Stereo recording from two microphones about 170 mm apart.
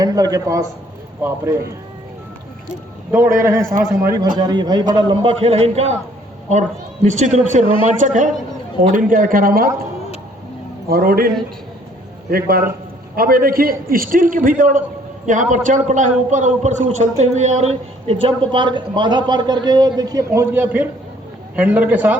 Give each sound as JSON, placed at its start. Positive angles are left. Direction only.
{"t": 0.0, "sound": "a man's voice", "side_deg": -20}
{"t": 3.4, "sound": "a man's voice", "side_deg": -20}
{"t": 7.6, "sound": "speech", "side_deg": 30}
{"t": 7.9, "sound": "a man's voice", "side_deg": -45}
{"t": 10.8, "sound": "a man's voice", "side_deg": -60}
{"t": 12.3, "sound": "a man's voice", "side_deg": -60}